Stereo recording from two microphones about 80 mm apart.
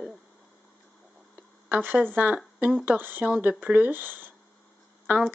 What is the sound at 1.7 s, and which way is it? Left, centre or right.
Speech, right.